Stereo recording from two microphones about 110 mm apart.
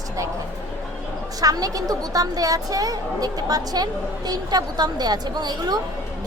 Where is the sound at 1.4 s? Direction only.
35° right (ahead or behind).